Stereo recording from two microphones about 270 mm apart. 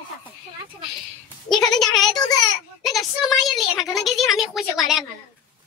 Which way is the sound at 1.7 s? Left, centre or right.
Centre.